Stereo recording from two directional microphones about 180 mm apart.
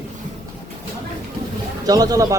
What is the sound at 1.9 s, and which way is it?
Speech, 20° right (ahead or behind).